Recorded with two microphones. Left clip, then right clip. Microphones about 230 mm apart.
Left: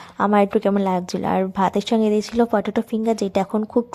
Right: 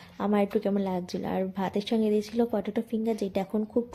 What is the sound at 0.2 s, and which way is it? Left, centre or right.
A woman's voice, left.